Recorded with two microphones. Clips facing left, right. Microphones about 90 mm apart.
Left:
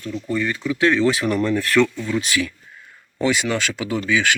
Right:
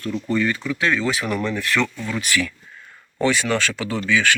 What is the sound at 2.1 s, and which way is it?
Speech, 20° left (ahead or behind).